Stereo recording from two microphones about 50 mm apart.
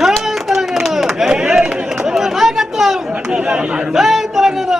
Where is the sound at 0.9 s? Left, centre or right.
Centre.